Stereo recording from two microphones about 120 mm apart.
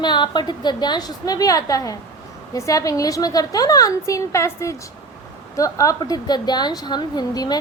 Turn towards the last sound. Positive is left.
turn(degrees=35)  # may be behind; listen again after turning